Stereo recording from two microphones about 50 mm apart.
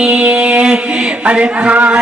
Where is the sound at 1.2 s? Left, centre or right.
Right.